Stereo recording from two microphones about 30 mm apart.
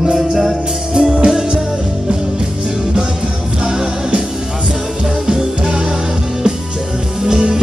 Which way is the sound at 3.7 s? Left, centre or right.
Right.